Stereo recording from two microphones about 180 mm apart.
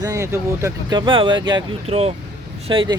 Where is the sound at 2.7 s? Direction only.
30° right (ahead or behind).